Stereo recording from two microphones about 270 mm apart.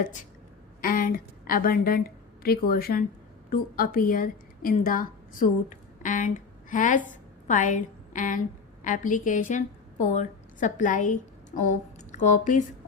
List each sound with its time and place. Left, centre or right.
0.0 s a woman's voice: left